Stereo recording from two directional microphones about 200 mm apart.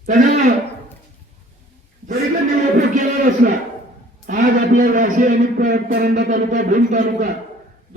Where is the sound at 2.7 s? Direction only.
40° right (ahead or behind).